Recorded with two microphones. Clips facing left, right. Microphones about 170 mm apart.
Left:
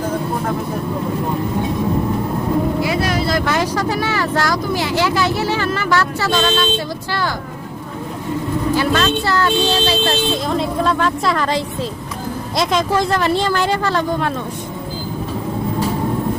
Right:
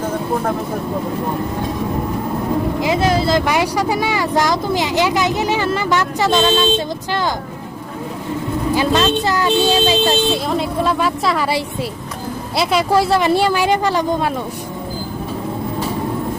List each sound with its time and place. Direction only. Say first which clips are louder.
2.8 s speech: right 3 dB; 25° right (ahead or behind)
3.4 s speech: right 1 dB; 15° right (ahead or behind)
8.7 s speech: right 2 dB; 20° right (ahead or behind)
11.2 s speech: even; 5° right (ahead or behind)